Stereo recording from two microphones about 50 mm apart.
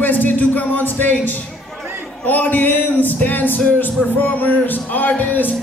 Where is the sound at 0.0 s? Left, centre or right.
Left.